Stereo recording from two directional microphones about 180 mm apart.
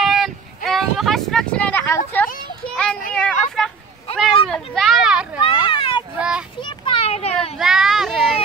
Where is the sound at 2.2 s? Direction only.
10° left (ahead or behind).